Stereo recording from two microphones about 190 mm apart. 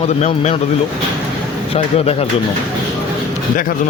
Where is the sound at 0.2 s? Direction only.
35° left (ahead or behind).